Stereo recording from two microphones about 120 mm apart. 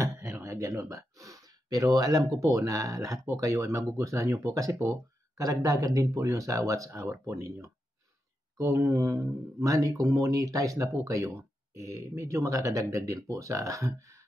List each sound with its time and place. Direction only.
0.0 s speech: 25° right (ahead or behind)